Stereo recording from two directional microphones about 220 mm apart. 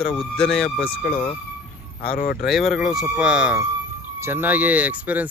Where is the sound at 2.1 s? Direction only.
40° left (ahead or behind).